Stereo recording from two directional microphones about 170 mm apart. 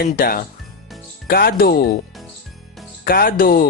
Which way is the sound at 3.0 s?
60° left (ahead or behind).